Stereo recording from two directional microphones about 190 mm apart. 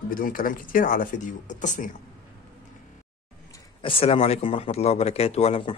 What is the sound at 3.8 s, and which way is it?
A man's voice, 30° left (ahead or behind).